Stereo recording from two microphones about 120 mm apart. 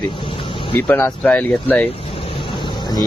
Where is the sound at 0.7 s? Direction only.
15° left (ahead or behind).